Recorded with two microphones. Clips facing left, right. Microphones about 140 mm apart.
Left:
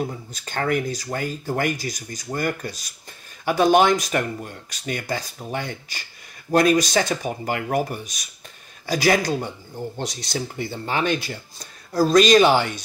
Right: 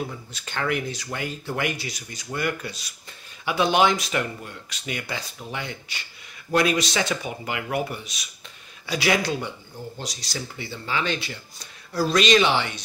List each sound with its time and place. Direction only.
0.3 s speech: 45° left (ahead or behind)
9.9 s speech: 55° left (ahead or behind)